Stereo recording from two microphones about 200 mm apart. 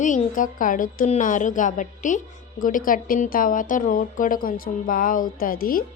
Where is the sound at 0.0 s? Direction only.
40° left (ahead or behind).